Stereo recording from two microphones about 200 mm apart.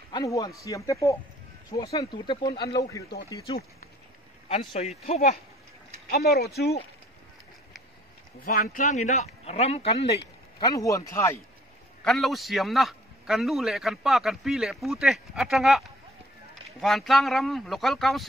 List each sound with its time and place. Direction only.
0.1 s speech: 15° left (ahead or behind)
4.5 s speech: 35° left (ahead or behind)
6.0 s speech: 55° left (ahead or behind)
8.4 s speech: 45° left (ahead or behind)
10.6 s speech: 15° left (ahead or behind)
12.0 s a man's voice: centre (ahead or behind)